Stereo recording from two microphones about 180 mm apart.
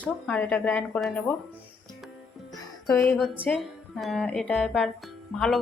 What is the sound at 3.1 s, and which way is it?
Speech, centre (ahead or behind).